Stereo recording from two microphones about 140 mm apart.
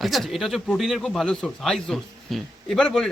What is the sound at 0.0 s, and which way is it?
Speech, centre (ahead or behind).